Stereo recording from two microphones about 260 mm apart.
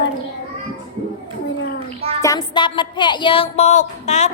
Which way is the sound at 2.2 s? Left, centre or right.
Centre.